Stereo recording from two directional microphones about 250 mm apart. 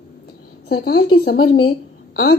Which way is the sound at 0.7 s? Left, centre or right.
Left.